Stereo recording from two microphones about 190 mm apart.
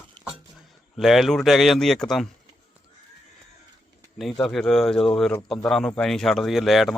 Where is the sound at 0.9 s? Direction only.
Centre (ahead or behind).